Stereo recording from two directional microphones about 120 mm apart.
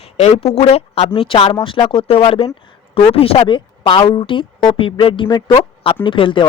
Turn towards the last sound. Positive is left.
turn(degrees=45)  # may be behind; listen again after turning